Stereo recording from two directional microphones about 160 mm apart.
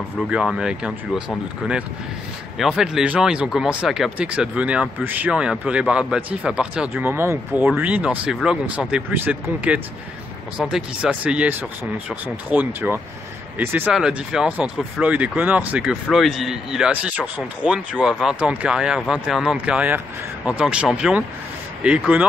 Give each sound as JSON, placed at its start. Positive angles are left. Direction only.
{"t": 0.3, "sound": "speech", "side_deg": -5}